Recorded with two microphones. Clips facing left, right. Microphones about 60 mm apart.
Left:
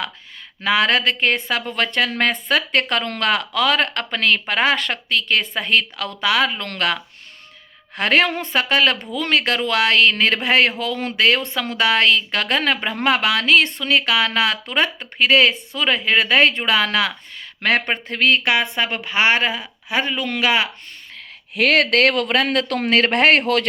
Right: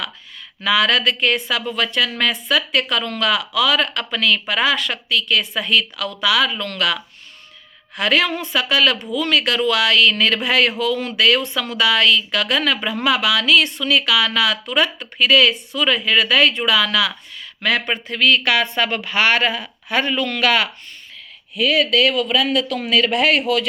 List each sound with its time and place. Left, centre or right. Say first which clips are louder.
0.6 s speech: even; left
21.5 s speech: left 1 dB; left